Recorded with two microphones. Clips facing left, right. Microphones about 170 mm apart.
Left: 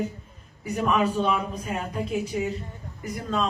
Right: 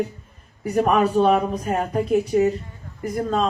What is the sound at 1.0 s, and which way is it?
Speech, 40° right (ahead or behind).